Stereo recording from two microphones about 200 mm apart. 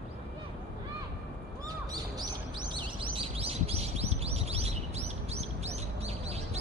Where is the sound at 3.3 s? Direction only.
30° right (ahead or behind).